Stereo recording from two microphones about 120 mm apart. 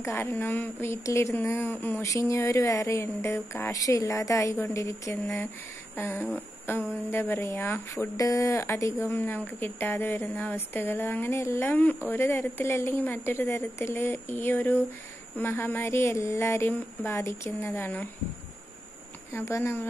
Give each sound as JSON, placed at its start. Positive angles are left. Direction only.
{"t": 0.0, "sound": "speech", "side_deg": 20}
{"t": 6.3, "sound": "a sound", "side_deg": 20}
{"t": 7.1, "sound": "speech", "side_deg": 20}
{"t": 19.3, "sound": "speech", "side_deg": 25}